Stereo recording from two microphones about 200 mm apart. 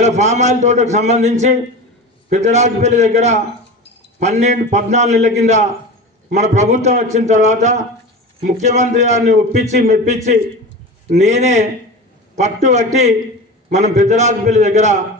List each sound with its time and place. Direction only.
0.0 s a man's voice: 35° right (ahead or behind)